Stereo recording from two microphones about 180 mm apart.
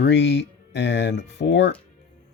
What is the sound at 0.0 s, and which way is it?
Speech, 70° left (ahead or behind).